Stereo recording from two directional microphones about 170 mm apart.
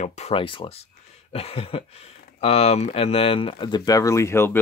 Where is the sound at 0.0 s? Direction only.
40° left (ahead or behind).